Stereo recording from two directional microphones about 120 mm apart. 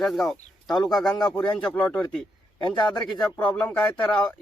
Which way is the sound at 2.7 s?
40° left (ahead or behind).